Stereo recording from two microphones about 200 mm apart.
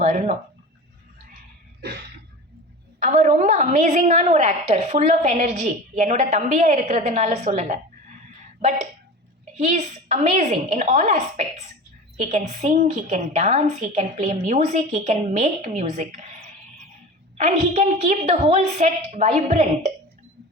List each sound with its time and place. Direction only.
0.0 s speech: 40° right (ahead or behind)
3.0 s a woman's voice: 40° right (ahead or behind)
9.6 s a woman's voice: 35° right (ahead or behind)
17.3 s a woman's voice: 35° right (ahead or behind)